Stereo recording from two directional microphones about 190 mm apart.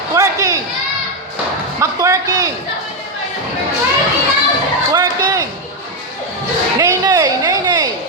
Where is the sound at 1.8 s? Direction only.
15° right (ahead or behind).